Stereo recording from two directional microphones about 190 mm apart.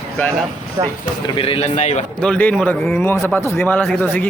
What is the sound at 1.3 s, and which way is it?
Speech, 30° left (ahead or behind).